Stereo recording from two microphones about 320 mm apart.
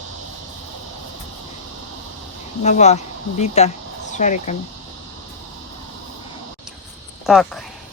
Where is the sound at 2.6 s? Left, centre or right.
Left.